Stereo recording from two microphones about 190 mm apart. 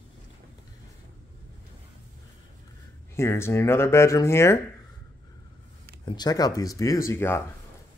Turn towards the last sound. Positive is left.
turn(degrees=15)  # may be behind; listen again after turning